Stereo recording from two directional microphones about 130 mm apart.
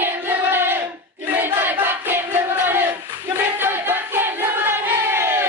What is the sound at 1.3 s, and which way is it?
Battle cry, 15° right (ahead or behind).